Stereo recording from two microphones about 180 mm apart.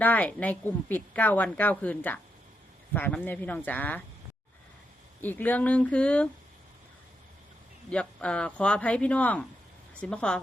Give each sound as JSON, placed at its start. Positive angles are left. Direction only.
{"t": 0.0, "sound": "a woman's voice", "side_deg": 10}
{"t": 5.2, "sound": "a woman's voice", "side_deg": 10}
{"t": 7.9, "sound": "a woman's voice", "side_deg": 5}